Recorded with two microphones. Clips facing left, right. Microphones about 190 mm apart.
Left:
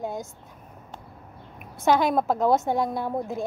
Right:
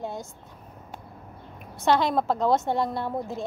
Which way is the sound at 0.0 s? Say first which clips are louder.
Left 2 dB; 45° left (ahead or behind).